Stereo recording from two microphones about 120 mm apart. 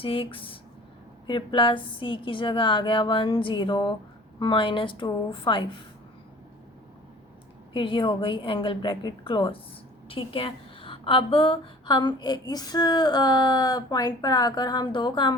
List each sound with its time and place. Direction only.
0.0 s a woman's voice: 50° left (ahead or behind)
7.7 s a woman's voice: 45° left (ahead or behind)